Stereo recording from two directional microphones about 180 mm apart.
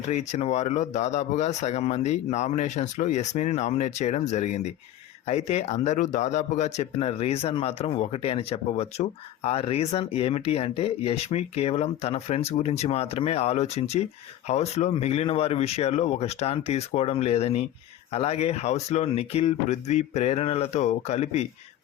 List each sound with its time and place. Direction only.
0.1 s speech: 40° left (ahead or behind)